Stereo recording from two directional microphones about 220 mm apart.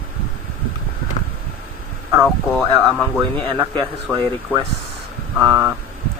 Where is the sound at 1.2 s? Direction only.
30° left (ahead or behind).